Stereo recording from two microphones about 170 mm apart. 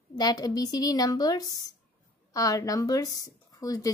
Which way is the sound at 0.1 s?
25° left (ahead or behind).